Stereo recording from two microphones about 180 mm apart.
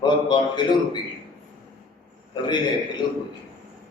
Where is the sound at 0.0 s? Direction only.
25° left (ahead or behind).